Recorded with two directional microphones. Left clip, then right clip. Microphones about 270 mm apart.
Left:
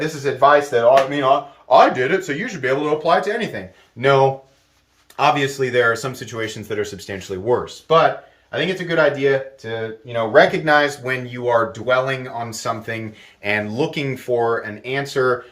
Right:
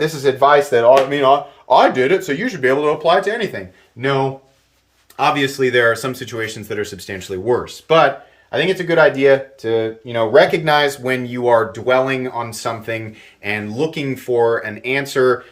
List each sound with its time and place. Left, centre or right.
0.0 s speech: right; by 3.6 s centre
4.0 s speech: centre
8.4 s speech: centre
10.1 s speech: right; by 15.3 s centre